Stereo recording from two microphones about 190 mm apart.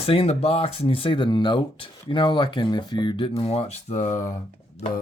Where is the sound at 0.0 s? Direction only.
30° left (ahead or behind).